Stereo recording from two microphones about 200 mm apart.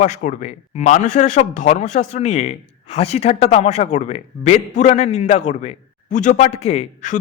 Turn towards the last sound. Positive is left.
turn(degrees=35)  # may be behind; listen again after turning